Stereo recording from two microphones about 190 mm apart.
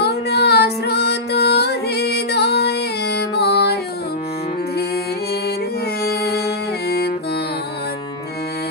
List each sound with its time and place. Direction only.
0.0 s music: 60° left (ahead or behind)